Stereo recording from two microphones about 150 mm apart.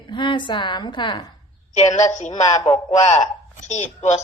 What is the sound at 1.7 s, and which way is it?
Speech, 50° left (ahead or behind).